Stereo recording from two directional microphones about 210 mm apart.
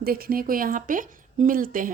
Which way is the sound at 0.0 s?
45° right (ahead or behind).